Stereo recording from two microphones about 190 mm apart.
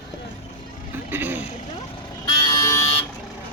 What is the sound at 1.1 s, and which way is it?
Speech, 10° right (ahead or behind).